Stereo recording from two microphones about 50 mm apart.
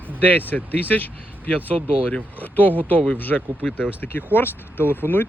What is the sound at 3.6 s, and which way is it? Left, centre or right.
Speech, centre.